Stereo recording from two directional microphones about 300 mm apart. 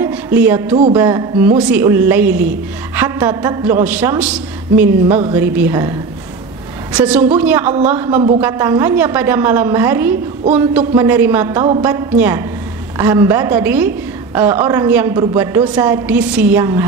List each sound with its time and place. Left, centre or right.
0.0 s a sound: centre
0.9 s a woman's voice: centre
3.0 s music: centre
3.8 s a man's voice: centre